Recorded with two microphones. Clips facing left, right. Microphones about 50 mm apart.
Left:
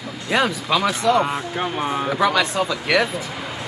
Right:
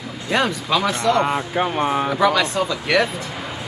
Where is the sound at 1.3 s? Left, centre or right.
Centre.